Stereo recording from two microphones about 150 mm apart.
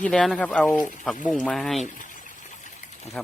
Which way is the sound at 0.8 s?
60° left (ahead or behind).